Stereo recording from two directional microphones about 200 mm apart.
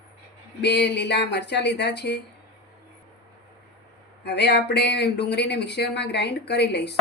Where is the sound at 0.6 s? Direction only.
60° left (ahead or behind).